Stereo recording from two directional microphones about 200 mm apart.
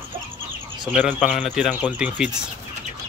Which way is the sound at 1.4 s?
5° right (ahead or behind).